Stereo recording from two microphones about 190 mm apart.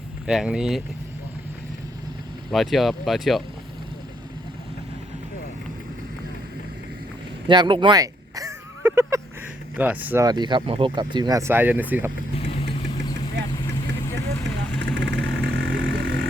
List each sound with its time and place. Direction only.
0.3 s speech: 5° right (ahead or behind)
2.5 s speech: centre (ahead or behind)
7.4 s a sound: 25° right (ahead or behind)
9.7 s speech: 10° right (ahead or behind)
10.2 s speech: 25° right (ahead or behind)
13.4 s vehicle: 70° right (ahead or behind)
14.8 s vehicle: 70° right (ahead or behind)